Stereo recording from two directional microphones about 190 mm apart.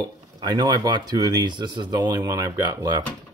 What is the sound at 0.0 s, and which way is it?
Speech, 20° right (ahead or behind).